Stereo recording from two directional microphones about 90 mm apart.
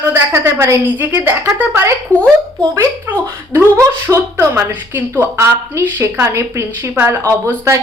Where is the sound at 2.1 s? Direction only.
15° left (ahead or behind).